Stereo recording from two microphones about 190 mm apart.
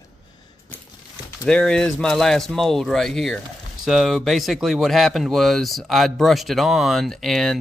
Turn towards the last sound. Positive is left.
turn(degrees=0)  # may be behind; listen again after turning